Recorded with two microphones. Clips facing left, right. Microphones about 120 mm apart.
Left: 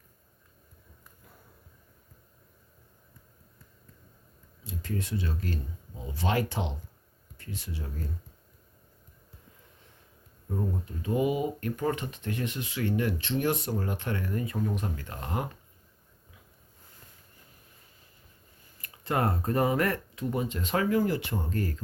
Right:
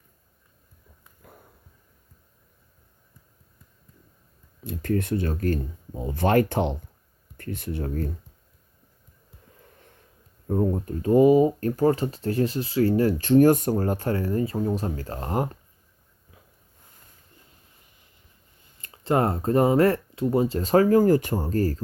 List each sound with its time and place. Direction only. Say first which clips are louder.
4.6 s speech: right 9 dB; 55° right (ahead or behind)
10.5 s speech: right 9 dB; 50° right (ahead or behind)
18.8 s speech: right 6 dB; 25° right (ahead or behind)